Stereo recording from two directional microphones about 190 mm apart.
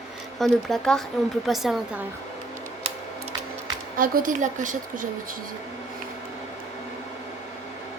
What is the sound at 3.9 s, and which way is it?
A woman's voice, 45° right (ahead or behind).